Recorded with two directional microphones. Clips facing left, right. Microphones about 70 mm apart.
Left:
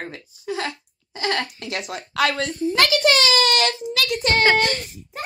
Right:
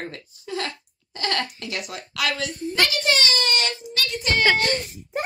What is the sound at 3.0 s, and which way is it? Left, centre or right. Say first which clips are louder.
A child's voice: left 5 dB; left.